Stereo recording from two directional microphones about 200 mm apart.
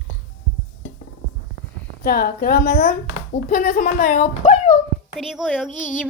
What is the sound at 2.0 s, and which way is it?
A woman's voice, 50° left (ahead or behind).